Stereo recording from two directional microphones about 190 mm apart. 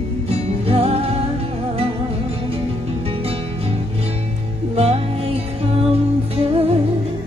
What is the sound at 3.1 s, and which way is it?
Music, 30° right (ahead or behind).